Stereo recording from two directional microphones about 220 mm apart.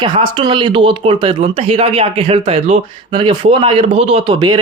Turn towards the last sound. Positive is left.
turn(degrees=-20)  # may be behind; listen again after turning